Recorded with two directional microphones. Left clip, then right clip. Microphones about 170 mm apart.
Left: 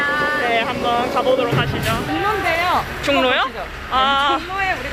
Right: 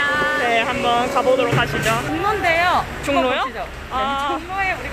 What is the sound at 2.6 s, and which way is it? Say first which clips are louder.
Speech: even; 5° right (ahead or behind).